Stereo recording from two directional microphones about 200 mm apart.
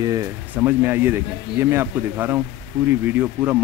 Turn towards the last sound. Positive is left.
turn(degrees=-5)  # may be behind; listen again after turning